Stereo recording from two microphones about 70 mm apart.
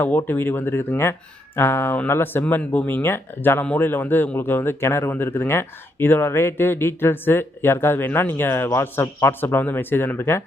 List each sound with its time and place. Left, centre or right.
0.3 s speech: left